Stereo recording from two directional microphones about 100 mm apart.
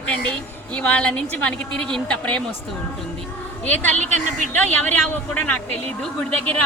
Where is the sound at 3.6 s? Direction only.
15° left (ahead or behind).